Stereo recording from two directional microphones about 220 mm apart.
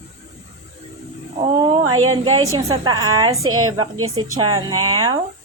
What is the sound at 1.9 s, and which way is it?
Speech, 70° right (ahead or behind).